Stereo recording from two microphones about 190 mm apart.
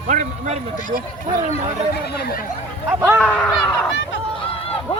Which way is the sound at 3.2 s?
5° left (ahead or behind).